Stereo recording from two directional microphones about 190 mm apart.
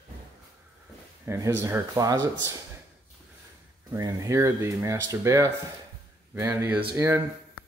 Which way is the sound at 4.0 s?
15° right (ahead or behind).